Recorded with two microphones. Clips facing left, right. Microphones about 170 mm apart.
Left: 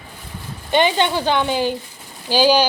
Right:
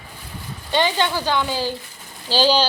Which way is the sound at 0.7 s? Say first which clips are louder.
Left 3 dB; 20° left (ahead or behind).